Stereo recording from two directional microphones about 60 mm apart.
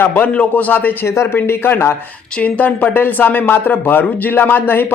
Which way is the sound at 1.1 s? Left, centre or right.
Left.